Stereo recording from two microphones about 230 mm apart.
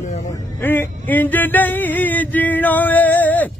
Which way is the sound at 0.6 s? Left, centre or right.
Centre.